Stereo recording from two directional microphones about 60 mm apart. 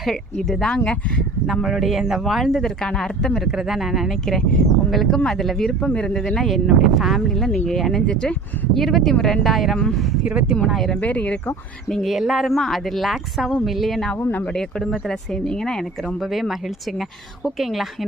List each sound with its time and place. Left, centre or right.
0.0 s speech: centre
3.5 s speech: centre
5.9 s speech: centre
10.2 s speech: centre
10.7 s speech: centre
11.0 s speech: left
12.0 s speech: centre
14.2 s speech: left
14.4 s speech: centre
16.0 s speech: centre